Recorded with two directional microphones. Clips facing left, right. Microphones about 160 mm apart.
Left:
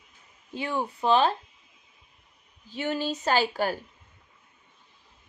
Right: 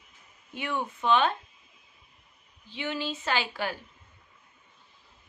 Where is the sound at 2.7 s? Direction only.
40° left (ahead or behind).